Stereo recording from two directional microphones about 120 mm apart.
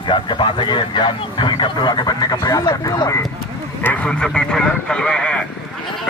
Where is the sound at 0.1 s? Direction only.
40° left (ahead or behind).